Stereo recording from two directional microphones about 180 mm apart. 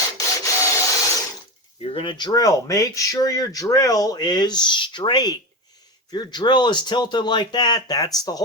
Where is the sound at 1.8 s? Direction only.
30° left (ahead or behind).